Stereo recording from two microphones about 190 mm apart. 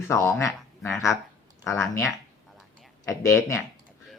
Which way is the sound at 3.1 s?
15° left (ahead or behind).